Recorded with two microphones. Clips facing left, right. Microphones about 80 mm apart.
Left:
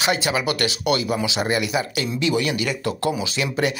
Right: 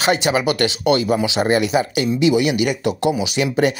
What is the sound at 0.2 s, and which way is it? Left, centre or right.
Speech, right.